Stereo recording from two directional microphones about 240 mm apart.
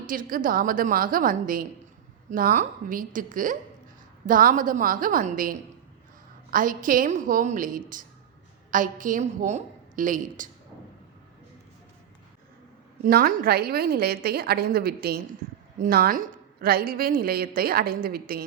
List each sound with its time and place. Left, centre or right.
0.0 s a woman's voice: right
13.1 s a woman's voice: right